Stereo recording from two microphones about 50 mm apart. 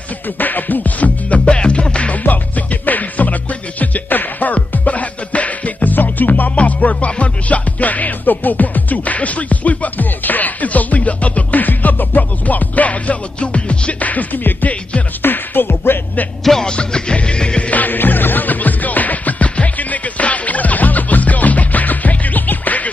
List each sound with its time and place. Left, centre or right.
0.4 s music: left
2.2 s music: left
15.2 s music: left
16.4 s music: centre
17.6 s music: left